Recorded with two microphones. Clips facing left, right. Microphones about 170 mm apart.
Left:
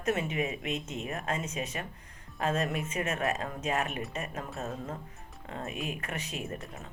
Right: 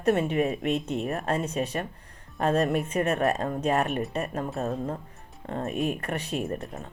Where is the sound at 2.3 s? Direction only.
60° right (ahead or behind).